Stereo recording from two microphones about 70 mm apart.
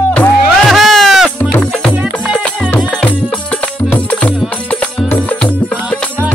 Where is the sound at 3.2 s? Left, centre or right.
Centre.